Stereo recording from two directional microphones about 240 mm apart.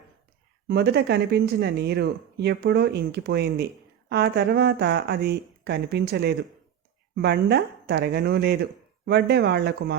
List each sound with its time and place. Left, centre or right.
0.7 s speech: right